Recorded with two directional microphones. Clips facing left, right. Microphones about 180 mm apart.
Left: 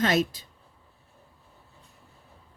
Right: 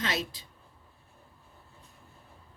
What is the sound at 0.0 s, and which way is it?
Speech, 50° left (ahead or behind).